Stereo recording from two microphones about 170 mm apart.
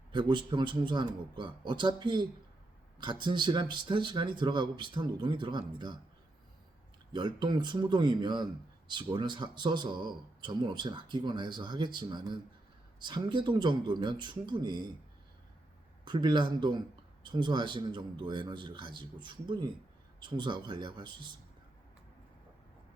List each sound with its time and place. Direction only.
0.1 s speech: 25° right (ahead or behind)
7.1 s speech: 25° right (ahead or behind)
16.0 s speech: 25° right (ahead or behind)